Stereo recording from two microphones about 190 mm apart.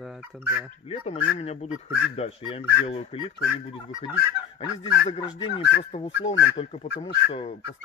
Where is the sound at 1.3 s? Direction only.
35° left (ahead or behind).